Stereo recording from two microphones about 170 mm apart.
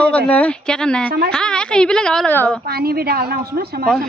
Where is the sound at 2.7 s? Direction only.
65° right (ahead or behind).